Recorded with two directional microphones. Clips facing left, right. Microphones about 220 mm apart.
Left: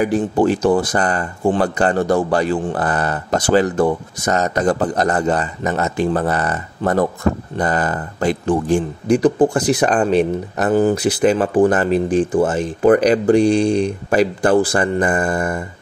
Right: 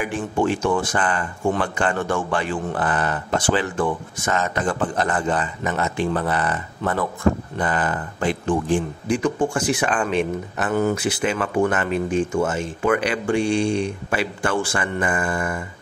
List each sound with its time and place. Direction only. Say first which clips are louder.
0.0 s speech: left 7 dB; 35° left (ahead or behind)